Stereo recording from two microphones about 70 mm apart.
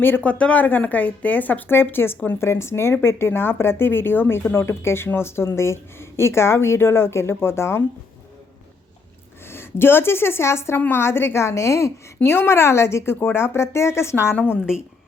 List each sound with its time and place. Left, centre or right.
0.2 s a woman's voice: centre; by 7.9 s left
9.5 s a woman's voice: left